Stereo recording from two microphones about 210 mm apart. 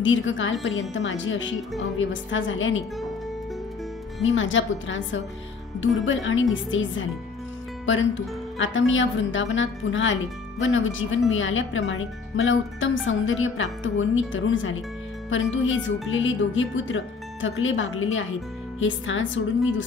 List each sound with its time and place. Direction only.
0.0 s speech: 65° left (ahead or behind)
4.4 s speech: 65° left (ahead or behind)